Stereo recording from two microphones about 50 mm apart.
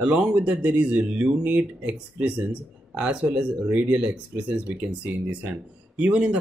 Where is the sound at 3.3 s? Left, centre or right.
Right.